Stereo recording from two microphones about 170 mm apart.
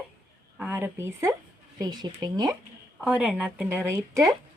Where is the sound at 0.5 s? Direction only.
10° right (ahead or behind).